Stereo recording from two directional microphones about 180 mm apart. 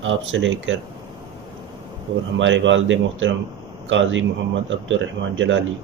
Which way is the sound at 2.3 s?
90° right.